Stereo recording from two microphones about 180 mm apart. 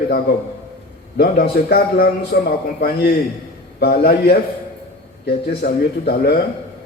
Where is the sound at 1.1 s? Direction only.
60° left (ahead or behind).